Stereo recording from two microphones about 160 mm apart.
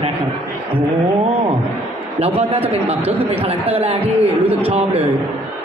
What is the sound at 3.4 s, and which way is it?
Speech, 35° right (ahead or behind).